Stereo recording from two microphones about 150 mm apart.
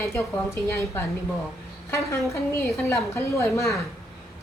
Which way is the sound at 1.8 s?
20° left (ahead or behind).